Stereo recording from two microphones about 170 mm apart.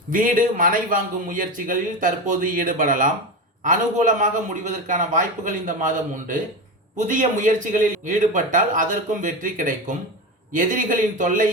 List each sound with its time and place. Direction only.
0.1 s speech: 55° right (ahead or behind)